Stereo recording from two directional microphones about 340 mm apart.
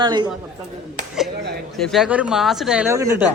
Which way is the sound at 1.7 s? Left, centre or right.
Centre.